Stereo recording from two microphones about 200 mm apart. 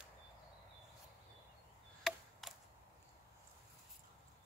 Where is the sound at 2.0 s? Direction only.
Centre (ahead or behind).